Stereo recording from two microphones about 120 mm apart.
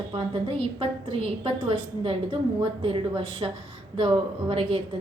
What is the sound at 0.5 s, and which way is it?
A woman's voice, 50° right (ahead or behind).